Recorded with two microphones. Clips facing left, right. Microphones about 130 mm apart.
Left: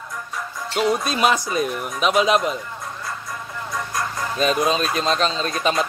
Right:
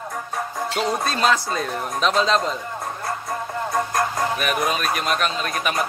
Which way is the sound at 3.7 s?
50° right (ahead or behind).